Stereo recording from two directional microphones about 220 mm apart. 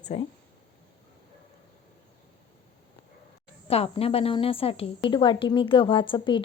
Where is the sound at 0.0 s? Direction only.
25° left (ahead or behind).